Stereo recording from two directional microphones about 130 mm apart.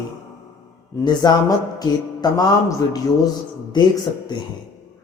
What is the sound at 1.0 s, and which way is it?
A man's voice, 30° left (ahead or behind).